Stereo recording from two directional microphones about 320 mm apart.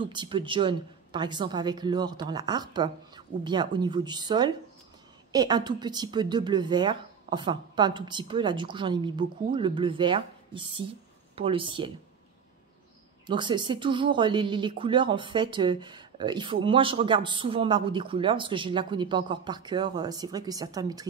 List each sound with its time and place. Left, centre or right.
0.0 s speech: centre
13.3 s speech: centre